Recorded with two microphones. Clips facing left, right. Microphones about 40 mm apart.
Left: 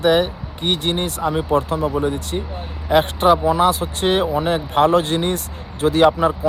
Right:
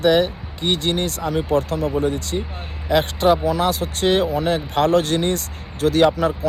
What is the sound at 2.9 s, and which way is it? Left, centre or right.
Speech, left.